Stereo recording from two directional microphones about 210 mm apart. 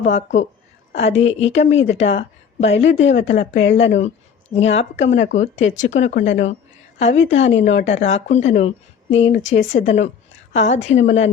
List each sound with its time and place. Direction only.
0.1 s speech: 35° left (ahead or behind)